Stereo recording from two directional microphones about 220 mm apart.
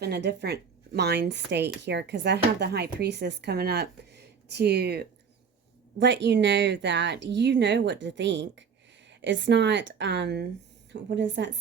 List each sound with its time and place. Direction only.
0.0 s a woman's voice: 50° right (ahead or behind)